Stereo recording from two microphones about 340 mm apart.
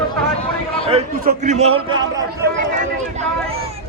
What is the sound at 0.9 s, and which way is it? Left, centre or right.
A man's voice, right.